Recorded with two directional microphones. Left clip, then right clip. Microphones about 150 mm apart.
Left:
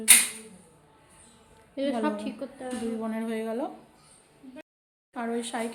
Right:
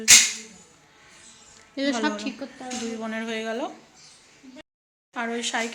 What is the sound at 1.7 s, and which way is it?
Speech, 55° right (ahead or behind).